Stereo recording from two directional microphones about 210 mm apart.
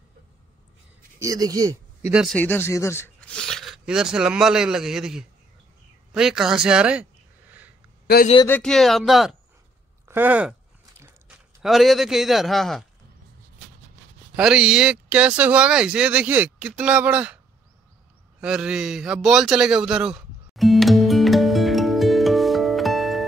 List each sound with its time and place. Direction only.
1.2 s speech: 15° right (ahead or behind)
2.2 s speech: 5° left (ahead or behind)
6.1 s a sound: centre (ahead or behind)
8.5 s a man's voice: 5° left (ahead or behind)
14.3 s speech: 5° right (ahead or behind)
18.4 s a sound: 5° right (ahead or behind)